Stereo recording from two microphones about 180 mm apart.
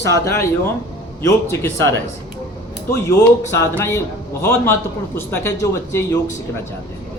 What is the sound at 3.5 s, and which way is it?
A man's voice, 15° left (ahead or behind).